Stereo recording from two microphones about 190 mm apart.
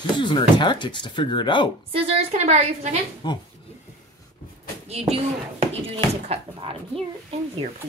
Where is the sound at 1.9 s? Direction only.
30° right (ahead or behind).